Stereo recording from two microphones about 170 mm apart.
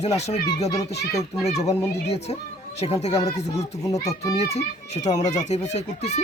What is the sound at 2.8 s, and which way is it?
Speech, 35° left (ahead or behind).